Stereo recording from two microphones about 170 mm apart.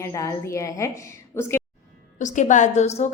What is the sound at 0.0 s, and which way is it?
A woman's voice, 20° left (ahead or behind).